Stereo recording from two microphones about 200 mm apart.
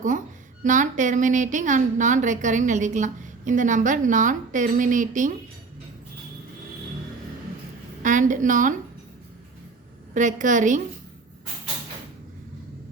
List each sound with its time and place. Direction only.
0.6 s a woman's voice: 40° right (ahead or behind)
8.0 s a woman's voice: 40° right (ahead or behind)
10.2 s a woman's voice: 40° right (ahead or behind)